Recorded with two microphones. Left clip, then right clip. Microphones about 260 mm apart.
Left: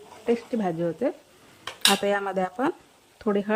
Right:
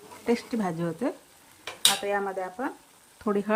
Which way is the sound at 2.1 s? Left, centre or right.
Left.